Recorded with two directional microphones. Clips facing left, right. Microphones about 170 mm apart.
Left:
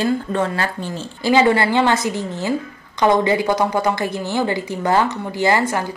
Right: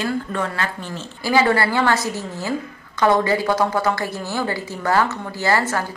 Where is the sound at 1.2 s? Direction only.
20° left (ahead or behind).